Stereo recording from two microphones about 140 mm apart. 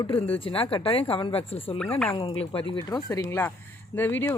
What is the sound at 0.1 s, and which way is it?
A woman's voice, 40° left (ahead or behind).